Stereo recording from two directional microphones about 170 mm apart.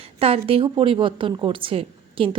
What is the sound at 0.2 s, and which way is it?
A woman's voice, 35° right (ahead or behind).